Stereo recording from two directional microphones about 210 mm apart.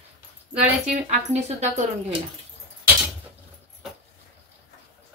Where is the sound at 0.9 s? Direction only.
30° right (ahead or behind).